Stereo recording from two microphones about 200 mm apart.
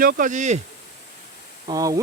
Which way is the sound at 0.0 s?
45° right (ahead or behind).